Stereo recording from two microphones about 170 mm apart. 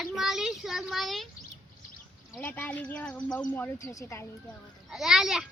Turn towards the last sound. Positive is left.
turn(degrees=-5)  # may be behind; listen again after turning